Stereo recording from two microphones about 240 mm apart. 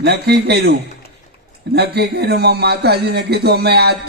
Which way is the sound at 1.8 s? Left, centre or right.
Right.